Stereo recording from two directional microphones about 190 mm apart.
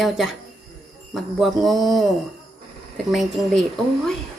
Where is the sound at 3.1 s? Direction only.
Centre (ahead or behind).